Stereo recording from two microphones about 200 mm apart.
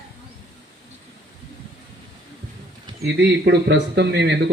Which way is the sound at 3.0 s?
60° right (ahead or behind).